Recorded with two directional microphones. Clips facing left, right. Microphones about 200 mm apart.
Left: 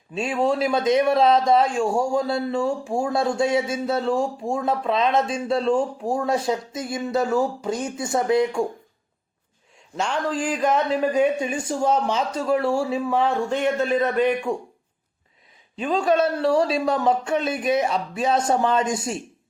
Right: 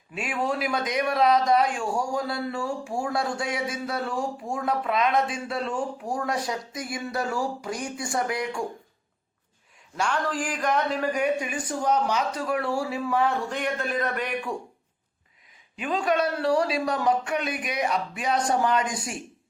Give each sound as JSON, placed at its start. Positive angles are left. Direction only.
{"t": 0.1, "sound": "speech", "side_deg": 25}
{"t": 10.0, "sound": "speech", "side_deg": 25}
{"t": 15.7, "sound": "speech", "side_deg": 25}